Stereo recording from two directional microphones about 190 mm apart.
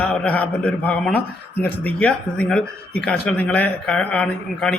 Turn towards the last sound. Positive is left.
turn(degrees=5)  # may be behind; listen again after turning